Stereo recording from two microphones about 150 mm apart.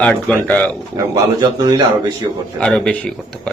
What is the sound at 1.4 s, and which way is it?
Speech, 30° right (ahead or behind).